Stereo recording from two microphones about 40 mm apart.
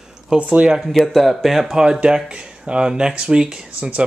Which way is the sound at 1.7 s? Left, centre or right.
Centre.